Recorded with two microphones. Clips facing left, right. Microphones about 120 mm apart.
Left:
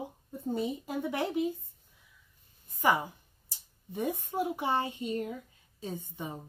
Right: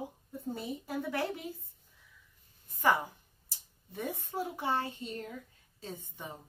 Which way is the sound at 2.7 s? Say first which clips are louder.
Left 1 dB; 15° left (ahead or behind).